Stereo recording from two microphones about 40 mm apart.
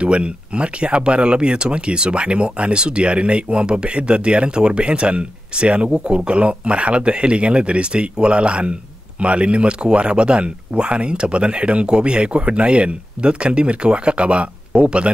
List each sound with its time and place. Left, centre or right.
0.0 s speech: right
5.9 s speech: centre
6.1 s speech: right